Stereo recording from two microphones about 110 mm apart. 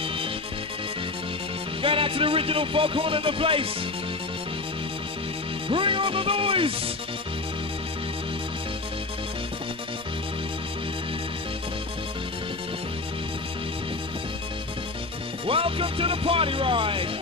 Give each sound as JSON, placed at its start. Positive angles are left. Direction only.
{"t": 1.8, "sound": "speech", "side_deg": -55}
{"t": 5.7, "sound": "music", "side_deg": -50}
{"t": 15.4, "sound": "speech", "side_deg": -55}